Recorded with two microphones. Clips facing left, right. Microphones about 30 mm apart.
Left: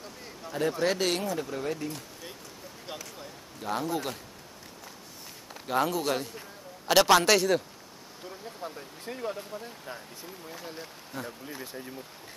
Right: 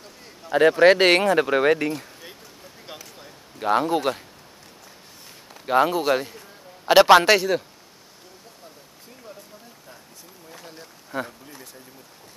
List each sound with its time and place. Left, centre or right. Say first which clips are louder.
0.5 s speech: right 13 dB; right
2.9 s basketball bounce: even; centre
3.5 s speech: right 10 dB; right
5.7 s a man's voice: right 8 dB; right
7.3 s speech: right 3 dB; centre
9.0 s speech: left 9 dB; left
10.5 s speech: even; centre
11.1 s a man's voice: right 8 dB; right